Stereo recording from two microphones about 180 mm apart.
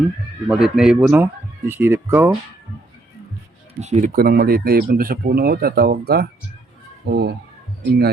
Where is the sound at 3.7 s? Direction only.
40° right (ahead or behind).